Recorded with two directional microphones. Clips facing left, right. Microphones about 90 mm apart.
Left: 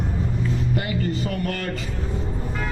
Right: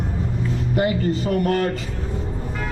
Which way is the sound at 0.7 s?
25° right (ahead or behind).